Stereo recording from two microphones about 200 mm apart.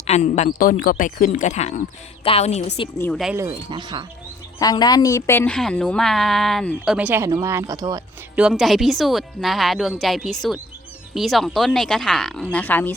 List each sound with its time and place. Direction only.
0.1 s speech: 35° left (ahead or behind)
3.0 s a woman's voice: centre (ahead or behind)
3.3 s speech: 20° right (ahead or behind)
4.6 s a woman's voice: 20° left (ahead or behind); by 8.0 s 15° right (ahead or behind)
8.4 s a woman's voice: centre (ahead or behind)